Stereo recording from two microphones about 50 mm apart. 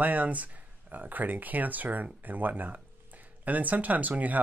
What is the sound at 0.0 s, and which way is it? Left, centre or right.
Speech, right.